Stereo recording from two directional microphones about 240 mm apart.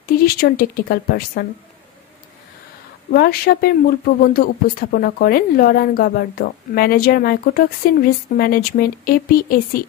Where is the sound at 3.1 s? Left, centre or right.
Left.